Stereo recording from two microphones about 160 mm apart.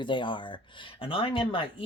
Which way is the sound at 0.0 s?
30° left (ahead or behind).